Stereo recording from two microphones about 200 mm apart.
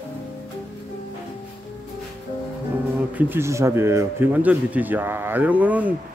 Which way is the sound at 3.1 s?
10° right (ahead or behind).